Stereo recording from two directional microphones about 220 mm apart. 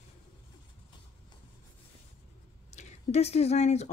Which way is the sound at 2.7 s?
30° left (ahead or behind).